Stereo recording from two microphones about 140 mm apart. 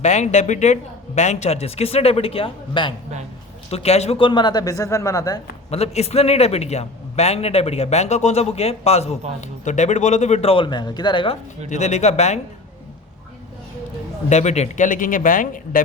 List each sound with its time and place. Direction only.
0.0 s a man's voice: 55° left (ahead or behind); by 2.9 s 40° left (ahead or behind)
3.7 s speech: 50° left (ahead or behind); by 5.4 s 25° left (ahead or behind)
5.7 s a man's voice: 50° left (ahead or behind)
11.7 s a man's voice: 55° left (ahead or behind)
14.3 s speech: 55° left (ahead or behind); by 15.8 s 75° left (ahead or behind)